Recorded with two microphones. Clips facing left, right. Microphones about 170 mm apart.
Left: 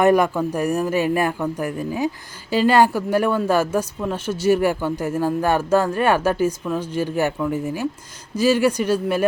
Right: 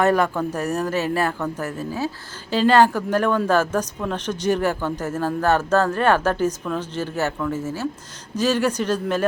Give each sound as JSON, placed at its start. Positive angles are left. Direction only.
{"t": 0.0, "sound": "speech", "side_deg": 15}